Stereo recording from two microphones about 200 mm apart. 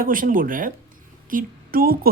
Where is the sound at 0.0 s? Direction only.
45° right (ahead or behind).